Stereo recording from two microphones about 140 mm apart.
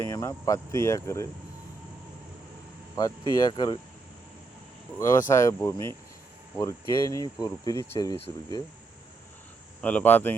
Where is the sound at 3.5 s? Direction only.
35° left (ahead or behind).